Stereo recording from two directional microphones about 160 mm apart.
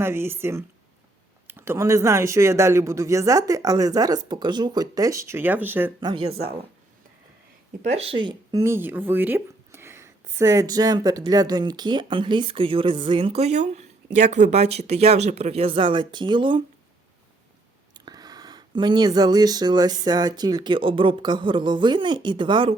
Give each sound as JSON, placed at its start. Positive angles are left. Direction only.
{"t": 0.0, "sound": "speech", "side_deg": -15}
{"t": 6.0, "sound": "speech", "side_deg": -25}
{"t": 7.8, "sound": "speech", "side_deg": -40}
{"t": 8.6, "sound": "speech", "side_deg": -15}
{"t": 17.9, "sound": "speech", "side_deg": -25}